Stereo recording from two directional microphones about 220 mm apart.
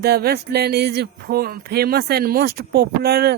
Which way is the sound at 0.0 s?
45° right (ahead or behind).